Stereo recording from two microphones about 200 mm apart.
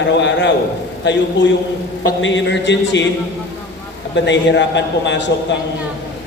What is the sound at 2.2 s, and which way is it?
Speech, 65° left (ahead or behind).